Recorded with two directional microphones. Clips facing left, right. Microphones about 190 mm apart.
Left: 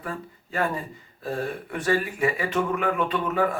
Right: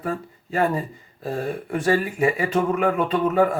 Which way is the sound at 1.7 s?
25° right (ahead or behind).